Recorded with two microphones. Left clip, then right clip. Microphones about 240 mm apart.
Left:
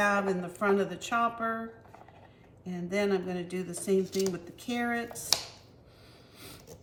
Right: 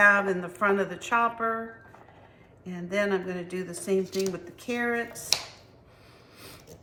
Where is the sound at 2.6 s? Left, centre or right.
Centre.